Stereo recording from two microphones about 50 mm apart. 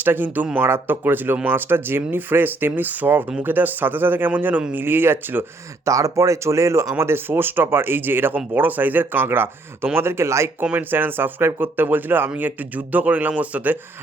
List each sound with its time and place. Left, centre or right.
0.0 s speech: right
5.8 s speech: right
6.9 s speech: right
10.8 s speech: right